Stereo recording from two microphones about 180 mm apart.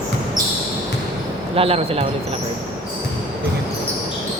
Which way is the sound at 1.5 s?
30° right (ahead or behind).